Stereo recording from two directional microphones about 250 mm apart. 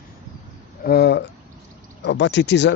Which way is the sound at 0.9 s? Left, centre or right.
Left.